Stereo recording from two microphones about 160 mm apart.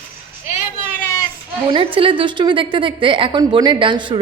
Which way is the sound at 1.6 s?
35° right (ahead or behind).